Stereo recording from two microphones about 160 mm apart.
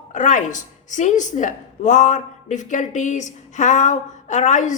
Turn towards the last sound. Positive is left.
turn(degrees=50)  # may be behind; listen again after turning